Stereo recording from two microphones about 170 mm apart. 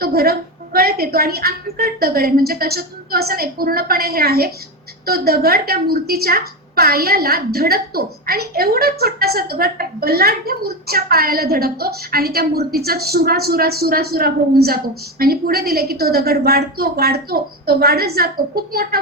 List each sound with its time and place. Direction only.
0.0 s a woman's voice: 65° right (ahead or behind)